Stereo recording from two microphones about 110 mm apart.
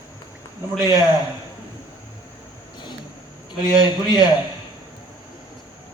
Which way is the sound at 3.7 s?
35° left (ahead or behind).